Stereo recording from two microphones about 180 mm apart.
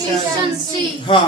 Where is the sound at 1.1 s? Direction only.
30° left (ahead or behind).